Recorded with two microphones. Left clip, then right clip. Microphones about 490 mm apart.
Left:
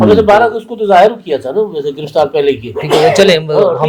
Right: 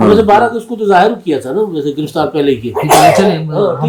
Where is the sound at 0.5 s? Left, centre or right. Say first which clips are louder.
Left 2 dB; left.